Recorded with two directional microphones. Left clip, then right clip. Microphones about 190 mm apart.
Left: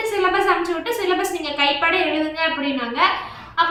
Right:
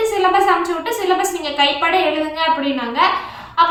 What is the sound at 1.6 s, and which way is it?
Speech, 20° right (ahead or behind).